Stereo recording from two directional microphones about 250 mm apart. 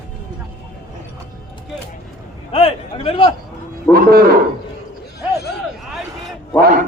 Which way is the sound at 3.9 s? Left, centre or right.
Right.